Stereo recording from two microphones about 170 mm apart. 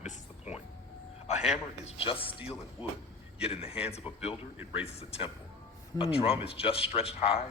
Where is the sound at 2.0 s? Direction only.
30° left (ahead or behind).